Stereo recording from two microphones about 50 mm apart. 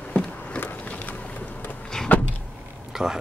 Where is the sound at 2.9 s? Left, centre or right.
Centre.